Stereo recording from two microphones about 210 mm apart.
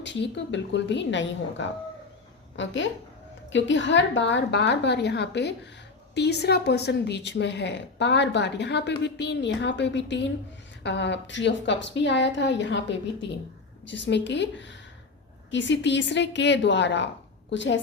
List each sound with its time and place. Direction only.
0.0 s speech: 55° left (ahead or behind)